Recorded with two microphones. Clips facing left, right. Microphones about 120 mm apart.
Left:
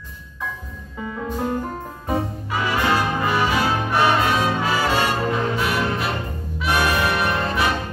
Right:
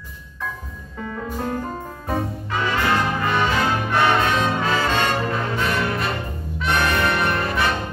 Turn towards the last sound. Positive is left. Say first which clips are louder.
# even
turn(degrees=15)  # may be behind; listen again after turning